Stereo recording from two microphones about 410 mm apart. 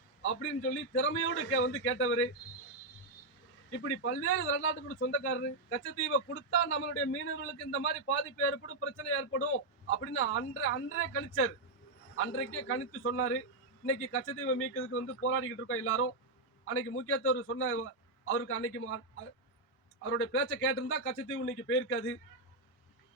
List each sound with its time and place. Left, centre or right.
0.3 s a man's voice: left
3.7 s a man's voice: left